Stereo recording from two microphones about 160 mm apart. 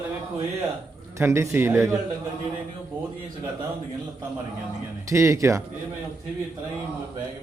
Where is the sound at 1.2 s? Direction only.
15° right (ahead or behind).